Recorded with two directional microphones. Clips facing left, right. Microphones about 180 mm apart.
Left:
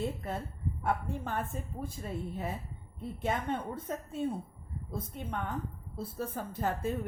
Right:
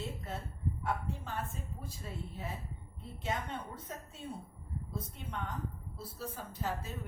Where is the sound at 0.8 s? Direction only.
50° left (ahead or behind).